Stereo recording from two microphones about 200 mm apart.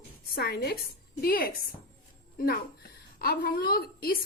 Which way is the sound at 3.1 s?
45° left (ahead or behind).